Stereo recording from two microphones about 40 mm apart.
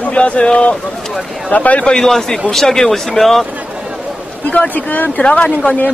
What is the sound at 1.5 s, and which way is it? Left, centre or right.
Speech, left.